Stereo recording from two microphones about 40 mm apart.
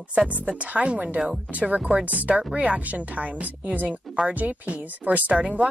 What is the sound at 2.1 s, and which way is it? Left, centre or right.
A woman's voice, right.